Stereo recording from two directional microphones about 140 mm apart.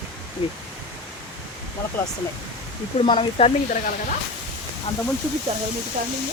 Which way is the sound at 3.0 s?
40° left (ahead or behind).